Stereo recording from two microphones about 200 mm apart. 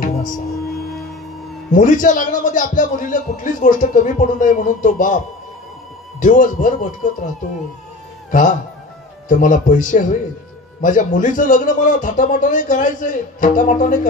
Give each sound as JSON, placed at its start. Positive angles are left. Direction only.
{"t": 0.0, "sound": "music", "side_deg": 40}
{"t": 1.7, "sound": "a man's voice", "side_deg": 40}
{"t": 6.1, "sound": "a man's voice", "side_deg": 40}
{"t": 8.3, "sound": "a man's voice", "side_deg": 40}